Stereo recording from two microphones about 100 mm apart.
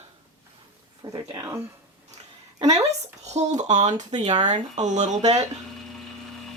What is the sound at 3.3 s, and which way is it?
Speech, 90° right.